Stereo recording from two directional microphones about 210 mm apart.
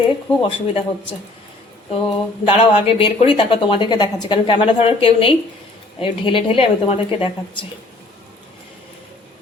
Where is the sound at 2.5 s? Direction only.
30° left (ahead or behind).